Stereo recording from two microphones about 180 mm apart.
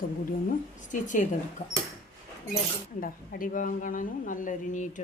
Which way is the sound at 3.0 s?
50° left (ahead or behind).